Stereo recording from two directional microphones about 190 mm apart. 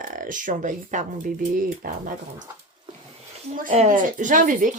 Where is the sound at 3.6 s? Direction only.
40° right (ahead or behind).